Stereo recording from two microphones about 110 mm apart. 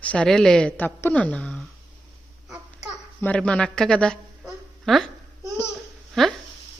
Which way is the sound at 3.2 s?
10° left (ahead or behind).